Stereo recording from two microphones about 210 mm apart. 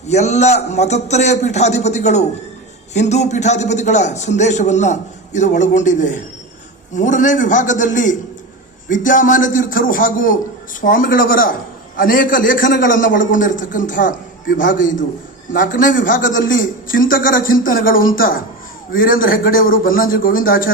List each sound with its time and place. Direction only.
0.1 s a man's voice: 30° left (ahead or behind)